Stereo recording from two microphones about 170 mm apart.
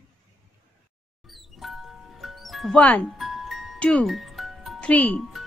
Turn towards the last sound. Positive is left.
turn(degrees=10)  # may be behind; listen again after turning